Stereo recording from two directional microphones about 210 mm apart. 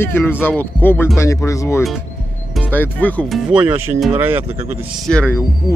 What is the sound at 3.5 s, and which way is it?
Speech, 5° right (ahead or behind).